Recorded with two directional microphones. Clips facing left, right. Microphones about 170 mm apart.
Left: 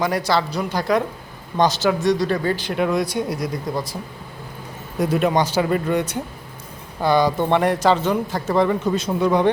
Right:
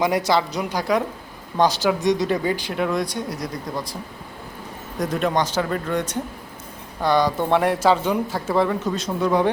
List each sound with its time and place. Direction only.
0.0 s speech: 20° right (ahead or behind)
2.7 s speech: 5° left (ahead or behind)
4.9 s speech: 10° left (ahead or behind)